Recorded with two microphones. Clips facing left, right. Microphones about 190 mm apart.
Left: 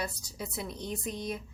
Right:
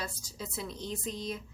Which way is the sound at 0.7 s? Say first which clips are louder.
Left 1 dB; 60° left (ahead or behind).